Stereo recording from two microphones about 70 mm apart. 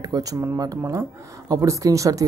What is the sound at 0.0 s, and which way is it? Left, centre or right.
Speech, right.